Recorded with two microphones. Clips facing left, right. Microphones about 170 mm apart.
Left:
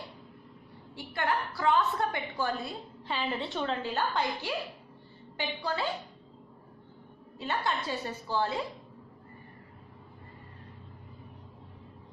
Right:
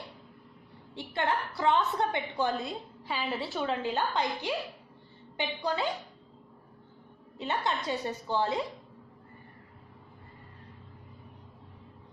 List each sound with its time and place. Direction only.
0.9 s a woman's voice: 25° right (ahead or behind)
3.1 s a woman's voice: 5° right (ahead or behind)
3.8 s a woman's voice: 20° right (ahead or behind)
7.3 s a woman's voice: 20° right (ahead or behind)